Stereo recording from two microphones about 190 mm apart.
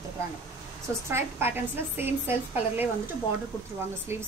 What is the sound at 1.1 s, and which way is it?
A woman's voice, 10° right (ahead or behind).